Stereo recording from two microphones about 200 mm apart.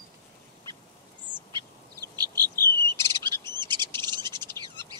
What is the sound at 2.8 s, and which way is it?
Chirp, 20° right (ahead or behind).